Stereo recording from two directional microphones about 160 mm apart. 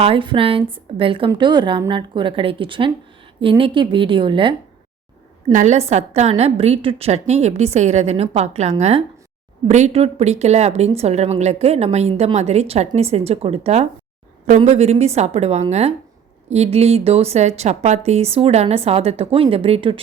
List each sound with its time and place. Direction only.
0.0 s a woman's voice: 35° right (ahead or behind)
5.5 s a woman's voice: 45° right (ahead or behind)